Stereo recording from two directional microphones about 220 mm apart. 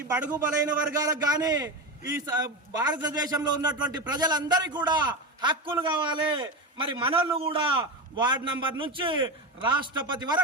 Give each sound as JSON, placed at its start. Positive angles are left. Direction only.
{"t": 0.1, "sound": "a man's voice", "side_deg": -10}